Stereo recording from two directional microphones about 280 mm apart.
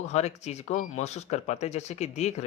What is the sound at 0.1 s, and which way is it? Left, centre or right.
Speech, left.